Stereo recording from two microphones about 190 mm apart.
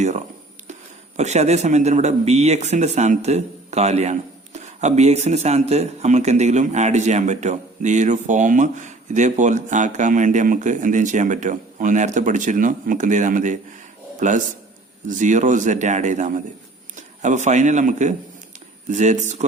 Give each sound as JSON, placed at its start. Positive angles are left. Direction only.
{"t": 0.7, "sound": "a man's voice", "side_deg": -35}